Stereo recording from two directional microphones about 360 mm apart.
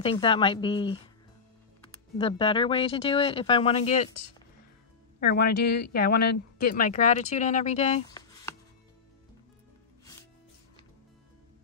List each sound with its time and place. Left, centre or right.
0.0 s speech: centre
2.1 s speech: centre
5.2 s speech: left